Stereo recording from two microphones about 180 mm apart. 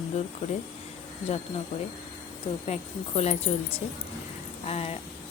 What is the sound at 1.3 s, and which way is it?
Speech, 35° left (ahead or behind).